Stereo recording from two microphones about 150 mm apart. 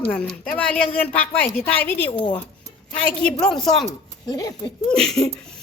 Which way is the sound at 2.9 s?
5° left (ahead or behind).